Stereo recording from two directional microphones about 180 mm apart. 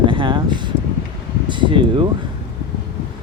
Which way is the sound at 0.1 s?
30° right (ahead or behind).